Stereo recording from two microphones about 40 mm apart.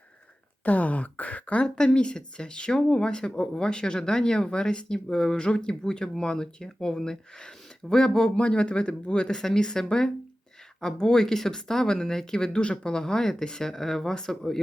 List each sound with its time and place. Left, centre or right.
0.6 s speech: left
1.6 s speech: centre